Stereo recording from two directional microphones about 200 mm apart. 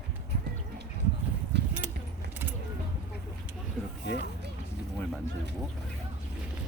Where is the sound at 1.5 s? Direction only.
55° right (ahead or behind).